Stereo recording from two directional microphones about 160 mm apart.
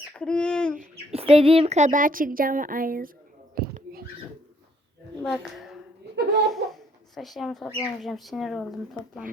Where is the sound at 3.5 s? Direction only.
70° right (ahead or behind).